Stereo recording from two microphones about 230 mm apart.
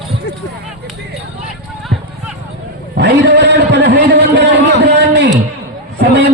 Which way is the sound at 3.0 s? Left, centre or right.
Right.